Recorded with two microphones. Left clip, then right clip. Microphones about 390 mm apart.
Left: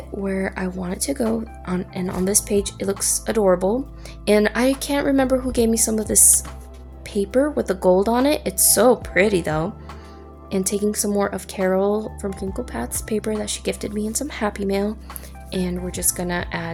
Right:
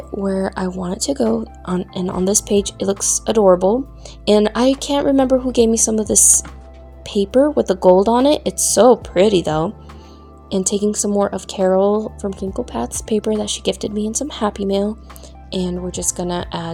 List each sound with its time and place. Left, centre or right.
0.2 s speech: left
15.5 s a woman's voice: left
15.9 s a woman's voice: left